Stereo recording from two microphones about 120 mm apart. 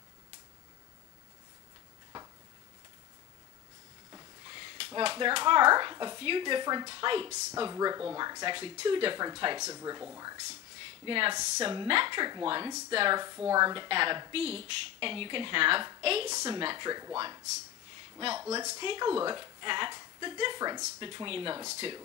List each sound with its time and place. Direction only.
4.5 s speech: 45° right (ahead or behind)
7.2 s speech: 30° right (ahead or behind)
11.1 s speech: 45° right (ahead or behind)
11.3 s speech: 35° right (ahead or behind)
13.2 s speech: 30° right (ahead or behind)
13.8 s a woman's voice: 45° right (ahead or behind)
16.3 s speech: 30° right (ahead or behind)
18.4 s speech: 25° right (ahead or behind)
18.8 s speech: 40° right (ahead or behind)